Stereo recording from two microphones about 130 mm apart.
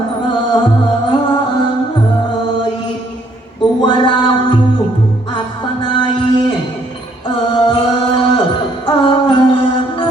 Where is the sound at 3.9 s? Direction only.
35° left (ahead or behind).